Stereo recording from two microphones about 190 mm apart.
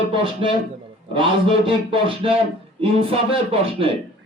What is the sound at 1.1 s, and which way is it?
A man's voice, 25° right (ahead or behind).